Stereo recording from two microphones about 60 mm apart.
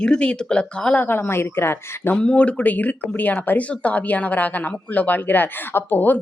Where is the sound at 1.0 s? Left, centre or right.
Left.